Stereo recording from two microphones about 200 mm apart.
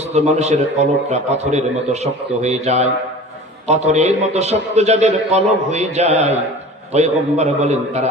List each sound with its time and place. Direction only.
0.0 s a man's voice: 35° right (ahead or behind)